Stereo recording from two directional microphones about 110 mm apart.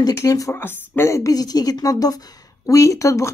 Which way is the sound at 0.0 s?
30° left (ahead or behind).